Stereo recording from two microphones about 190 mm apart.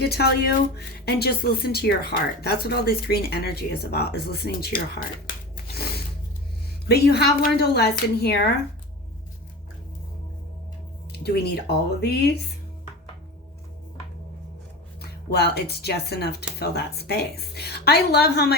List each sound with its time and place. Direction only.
0.0 s speech: 55° left (ahead or behind)
5.7 s music: 55° left (ahead or behind)
6.8 s speech: 55° left (ahead or behind)
11.1 s a sound: 60° left (ahead or behind)
15.0 s speech: 55° left (ahead or behind)